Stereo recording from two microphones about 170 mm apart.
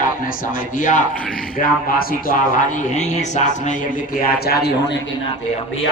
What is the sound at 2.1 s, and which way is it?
A man's voice, 50° left (ahead or behind).